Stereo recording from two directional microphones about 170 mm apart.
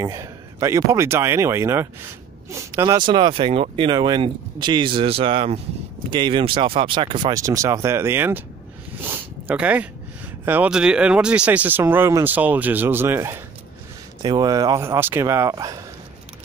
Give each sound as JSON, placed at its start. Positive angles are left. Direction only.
{"t": 0.0, "sound": "speech", "side_deg": -20}
{"t": 9.0, "sound": "a sound", "side_deg": -10}
{"t": 10.4, "sound": "speech", "side_deg": -10}
{"t": 14.2, "sound": "speech", "side_deg": -25}